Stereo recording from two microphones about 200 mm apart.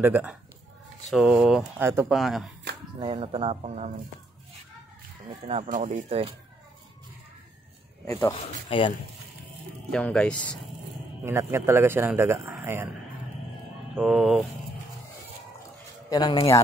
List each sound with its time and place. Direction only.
0.0 s a man's voice: 10° right (ahead or behind)
2.1 s speech: centre (ahead or behind)
3.0 s speech: 25° right (ahead or behind)
5.7 s speech: 40° right (ahead or behind)
8.1 s speech: 15° left (ahead or behind)
8.4 s a man's voice: 25° left (ahead or behind)
9.8 s speech: 5° left (ahead or behind)
11.2 s a man's voice: 15° right (ahead or behind)
13.9 s speech: centre (ahead or behind)
16.1 s a man's voice: 20° left (ahead or behind)